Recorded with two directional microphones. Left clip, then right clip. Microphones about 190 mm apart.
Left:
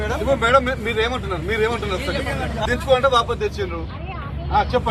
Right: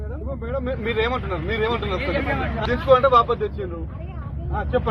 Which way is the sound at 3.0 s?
10° left (ahead or behind).